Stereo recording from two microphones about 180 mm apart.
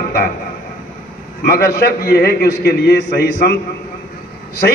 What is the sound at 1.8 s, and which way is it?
A man's voice, 60° left (ahead or behind).